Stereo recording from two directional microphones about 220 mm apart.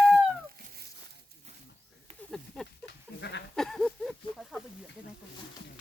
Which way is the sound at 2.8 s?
50° left (ahead or behind).